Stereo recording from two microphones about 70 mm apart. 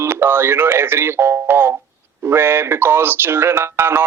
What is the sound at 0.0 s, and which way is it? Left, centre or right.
Speech, right.